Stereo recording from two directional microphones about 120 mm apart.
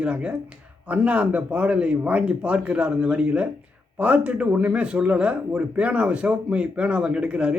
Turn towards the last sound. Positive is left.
turn(degrees=-10)  # may be behind; listen again after turning